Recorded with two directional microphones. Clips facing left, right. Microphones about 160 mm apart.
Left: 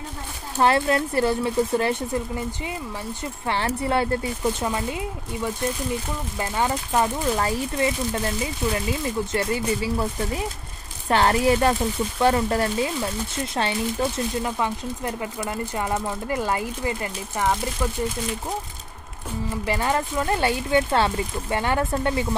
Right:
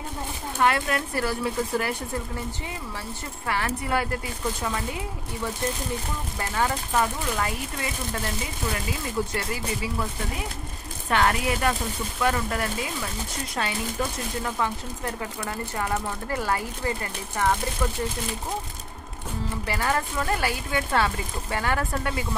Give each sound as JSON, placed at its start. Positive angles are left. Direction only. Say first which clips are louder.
{"t": 0.6, "sound": "speech", "louder": "left 4 dB", "side_deg": 30}
{"t": 3.4, "sound": "speech", "louder": "left 3 dB", "side_deg": 30}
{"t": 6.5, "sound": "speech", "louder": "left 2 dB", "side_deg": 20}
{"t": 9.3, "sound": "speech", "louder": "left 6 dB", "side_deg": 30}
{"t": 11.1, "sound": "speech", "louder": "left 5 dB", "side_deg": 30}
{"t": 14.4, "sound": "speech", "louder": "left 2 dB", "side_deg": 20}
{"t": 19.6, "sound": "speech", "louder": "left 3 dB", "side_deg": 20}